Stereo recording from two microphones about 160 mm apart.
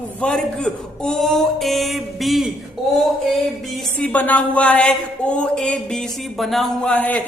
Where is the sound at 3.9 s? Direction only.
10° left (ahead or behind).